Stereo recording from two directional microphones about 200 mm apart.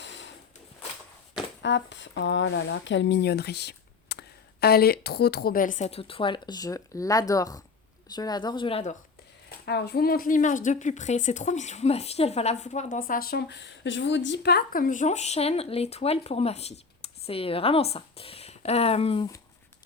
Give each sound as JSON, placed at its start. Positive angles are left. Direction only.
{"t": 1.6, "sound": "speech", "side_deg": 65}
{"t": 9.5, "sound": "a woman's voice", "side_deg": 55}